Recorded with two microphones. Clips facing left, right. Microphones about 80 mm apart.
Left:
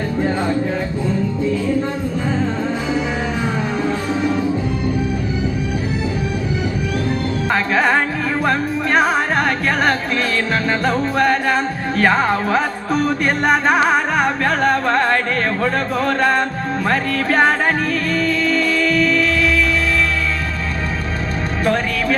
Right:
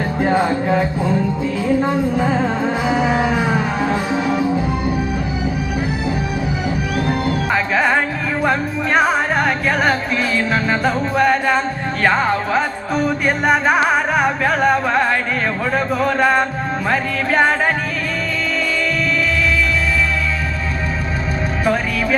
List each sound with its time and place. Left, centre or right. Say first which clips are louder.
0.3 s music: right 3 dB; right
7.5 s music: left 1 dB; centre
21.6 s music: left 1 dB; centre